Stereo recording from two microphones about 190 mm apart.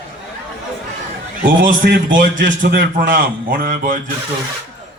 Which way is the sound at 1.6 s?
45° right (ahead or behind).